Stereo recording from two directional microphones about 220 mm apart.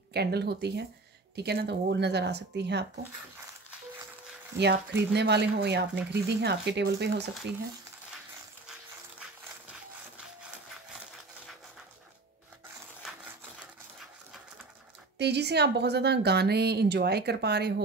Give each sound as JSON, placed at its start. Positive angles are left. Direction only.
{"t": 0.1, "sound": "a woman's voice", "side_deg": -45}
{"t": 4.6, "sound": "a woman's voice", "side_deg": -50}
{"t": 13.0, "sound": "a sound", "side_deg": -5}
{"t": 15.1, "sound": "a woman's voice", "side_deg": -50}